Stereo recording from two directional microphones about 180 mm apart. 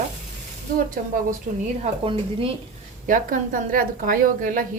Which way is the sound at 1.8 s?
30° right (ahead or behind).